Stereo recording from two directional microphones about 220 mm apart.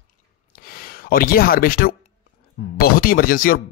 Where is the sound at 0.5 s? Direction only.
40° left (ahead or behind).